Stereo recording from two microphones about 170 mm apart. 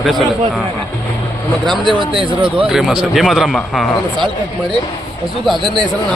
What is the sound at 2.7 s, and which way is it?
A man's voice, centre (ahead or behind).